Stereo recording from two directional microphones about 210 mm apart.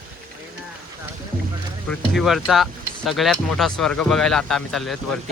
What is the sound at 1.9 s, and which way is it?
Speech, centre (ahead or behind).